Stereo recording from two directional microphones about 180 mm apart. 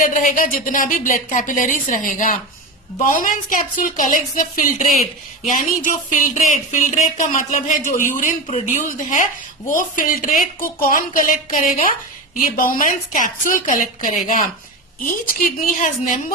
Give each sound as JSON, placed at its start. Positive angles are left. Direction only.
{"t": 0.0, "sound": "speech", "side_deg": 50}